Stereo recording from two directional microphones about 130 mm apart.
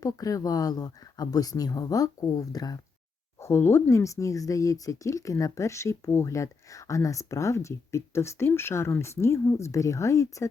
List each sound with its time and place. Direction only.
0.0 s speech: 30° left (ahead or behind)
3.4 s speech: 20° left (ahead or behind)